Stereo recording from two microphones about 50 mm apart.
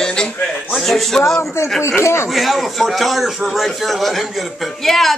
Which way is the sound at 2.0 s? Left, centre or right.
Left.